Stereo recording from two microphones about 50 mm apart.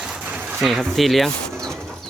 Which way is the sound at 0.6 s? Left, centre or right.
Centre.